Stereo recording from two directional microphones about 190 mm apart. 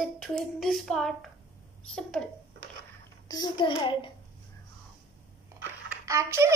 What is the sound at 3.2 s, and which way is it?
Speech, 20° left (ahead or behind).